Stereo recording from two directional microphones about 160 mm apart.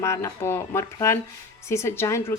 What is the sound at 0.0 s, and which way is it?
A woman's voice, 15° left (ahead or behind).